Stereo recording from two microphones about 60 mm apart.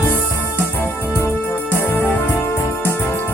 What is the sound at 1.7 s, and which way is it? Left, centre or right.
Music, left.